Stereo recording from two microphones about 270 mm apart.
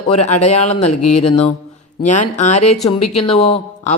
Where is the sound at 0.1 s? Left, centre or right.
Left.